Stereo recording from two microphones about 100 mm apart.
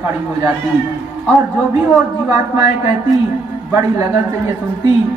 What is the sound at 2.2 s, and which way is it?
Speech, 25° right (ahead or behind).